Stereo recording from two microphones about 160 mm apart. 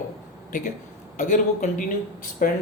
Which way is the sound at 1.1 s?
50° left (ahead or behind).